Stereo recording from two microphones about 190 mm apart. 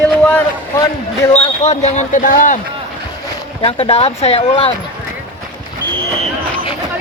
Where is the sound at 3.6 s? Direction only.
30° left (ahead or behind).